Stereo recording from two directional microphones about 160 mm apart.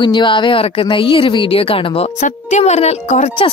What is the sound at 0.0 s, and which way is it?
A woman's voice, 30° left (ahead or behind).